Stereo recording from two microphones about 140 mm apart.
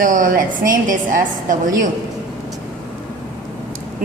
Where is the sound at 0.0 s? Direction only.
75° right (ahead or behind).